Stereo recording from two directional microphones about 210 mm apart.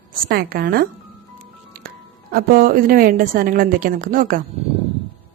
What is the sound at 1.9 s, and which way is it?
Speech, 45° right (ahead or behind).